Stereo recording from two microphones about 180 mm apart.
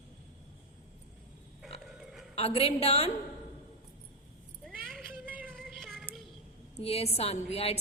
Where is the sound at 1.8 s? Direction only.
Centre (ahead or behind).